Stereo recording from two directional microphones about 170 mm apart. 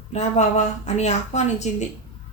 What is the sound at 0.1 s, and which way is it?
A woman's voice, 40° left (ahead or behind).